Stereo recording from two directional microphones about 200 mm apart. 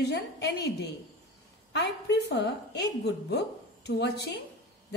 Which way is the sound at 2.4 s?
55° left (ahead or behind).